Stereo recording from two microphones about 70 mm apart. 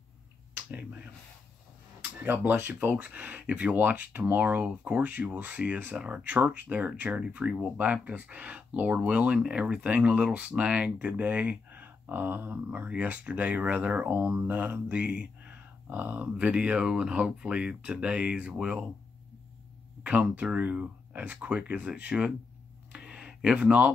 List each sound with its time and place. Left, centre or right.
2.5 s speech: right
20.0 s speech: right
22.9 s a sound: centre